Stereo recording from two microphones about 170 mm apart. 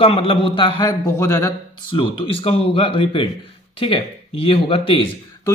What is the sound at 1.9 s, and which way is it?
Speech, 35° left (ahead or behind).